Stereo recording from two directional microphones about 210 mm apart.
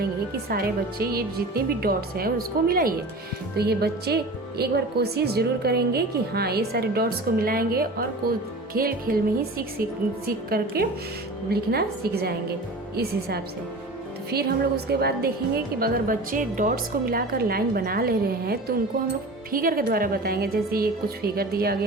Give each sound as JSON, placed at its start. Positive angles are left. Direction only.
{"t": 0.0, "sound": "speech", "side_deg": -45}